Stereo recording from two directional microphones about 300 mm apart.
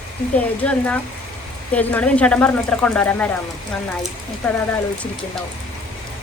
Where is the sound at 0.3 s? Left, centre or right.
Centre.